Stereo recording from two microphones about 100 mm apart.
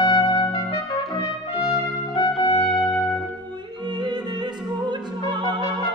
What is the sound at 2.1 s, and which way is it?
Music, 45° left (ahead or behind).